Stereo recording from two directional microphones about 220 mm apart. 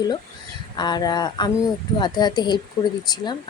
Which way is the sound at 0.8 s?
20° left (ahead or behind).